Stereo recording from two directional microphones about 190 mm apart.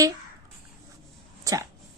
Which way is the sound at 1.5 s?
20° right (ahead or behind).